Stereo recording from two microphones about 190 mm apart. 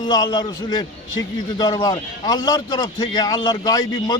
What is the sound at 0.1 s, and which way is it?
A man's voice, 20° left (ahead or behind).